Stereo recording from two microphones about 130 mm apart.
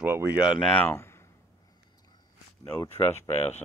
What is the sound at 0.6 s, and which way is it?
Speech, 5° left (ahead or behind).